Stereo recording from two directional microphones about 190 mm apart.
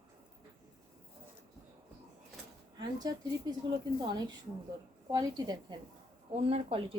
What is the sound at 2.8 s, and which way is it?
Speech, 20° right (ahead or behind).